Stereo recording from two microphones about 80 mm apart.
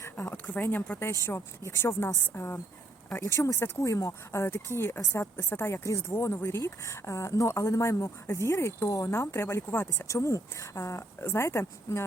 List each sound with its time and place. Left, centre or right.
0.3 s speech: left
1.2 s speech: left
10.1 s speech: left